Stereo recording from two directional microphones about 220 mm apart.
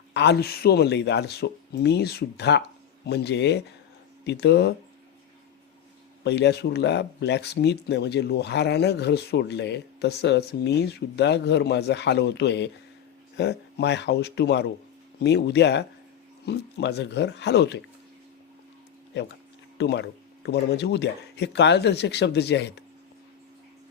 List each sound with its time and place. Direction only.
0.1 s speech: 50° left (ahead or behind)
6.2 s speech: 50° left (ahead or behind)
19.8 s speech: 50° left (ahead or behind)